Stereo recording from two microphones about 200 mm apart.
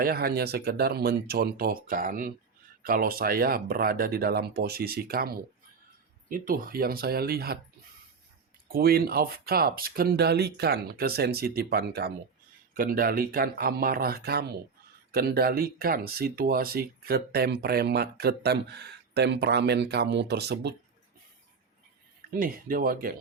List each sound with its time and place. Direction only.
0.0 s speech: 50° right (ahead or behind)
8.7 s speech: 50° right (ahead or behind)
22.3 s speech: 45° right (ahead or behind)